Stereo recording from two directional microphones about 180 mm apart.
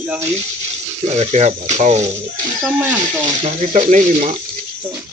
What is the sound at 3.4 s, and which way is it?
Speech, 40° right (ahead or behind).